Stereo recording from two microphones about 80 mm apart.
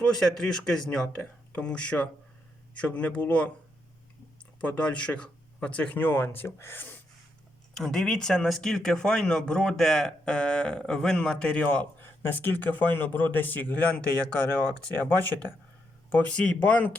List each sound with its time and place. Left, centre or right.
0.0 s speech: centre
4.6 s speech: centre
7.8 s speech: centre
12.2 s speech: left
16.0 s speech: centre